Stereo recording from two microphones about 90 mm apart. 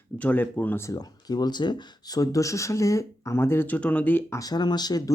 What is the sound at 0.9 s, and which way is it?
Speech, 45° left (ahead or behind).